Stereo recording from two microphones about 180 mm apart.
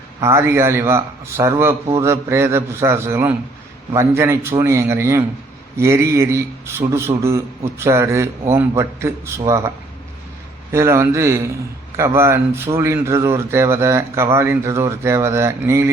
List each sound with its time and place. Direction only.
0.2 s a man's voice: 15° right (ahead or behind)